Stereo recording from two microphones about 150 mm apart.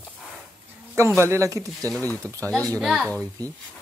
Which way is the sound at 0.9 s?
20° right (ahead or behind).